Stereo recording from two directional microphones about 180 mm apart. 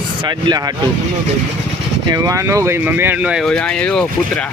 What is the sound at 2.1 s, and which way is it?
Speech, 20° right (ahead or behind).